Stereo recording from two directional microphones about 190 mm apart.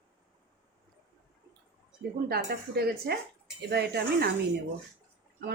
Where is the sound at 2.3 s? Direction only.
55° right (ahead or behind).